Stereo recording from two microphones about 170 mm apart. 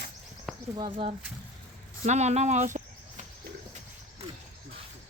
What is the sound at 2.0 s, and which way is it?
Speech, 40° right (ahead or behind).